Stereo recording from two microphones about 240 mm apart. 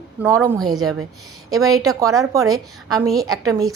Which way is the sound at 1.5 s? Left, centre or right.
Centre.